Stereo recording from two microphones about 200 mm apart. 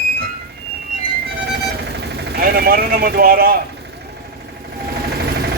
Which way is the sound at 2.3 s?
50° right (ahead or behind).